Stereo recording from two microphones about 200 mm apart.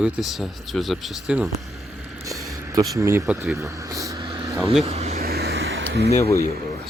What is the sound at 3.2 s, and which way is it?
Speech, centre (ahead or behind).